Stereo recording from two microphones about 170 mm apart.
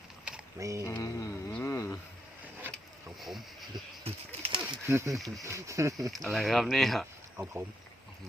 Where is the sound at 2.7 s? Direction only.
Centre (ahead or behind).